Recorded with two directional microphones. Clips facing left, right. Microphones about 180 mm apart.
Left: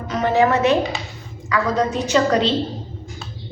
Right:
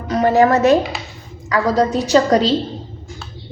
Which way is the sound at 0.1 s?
40° right (ahead or behind).